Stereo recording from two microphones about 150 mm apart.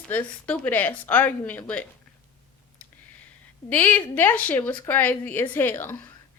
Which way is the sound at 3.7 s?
10° left (ahead or behind).